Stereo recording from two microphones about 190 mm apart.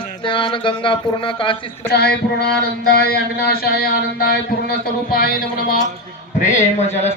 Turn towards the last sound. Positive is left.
turn(degrees=40)  # may be behind; listen again after turning